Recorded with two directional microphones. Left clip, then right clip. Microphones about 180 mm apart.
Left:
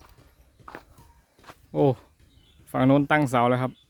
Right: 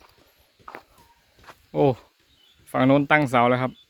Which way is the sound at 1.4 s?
15° left (ahead or behind).